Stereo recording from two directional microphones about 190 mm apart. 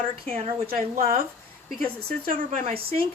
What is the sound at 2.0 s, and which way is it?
Speech, 45° right (ahead or behind).